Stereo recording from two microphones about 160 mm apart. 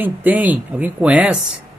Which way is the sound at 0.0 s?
10° right (ahead or behind).